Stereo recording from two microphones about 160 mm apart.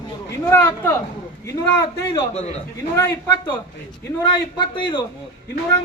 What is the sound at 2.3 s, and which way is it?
Speech, 40° left (ahead or behind).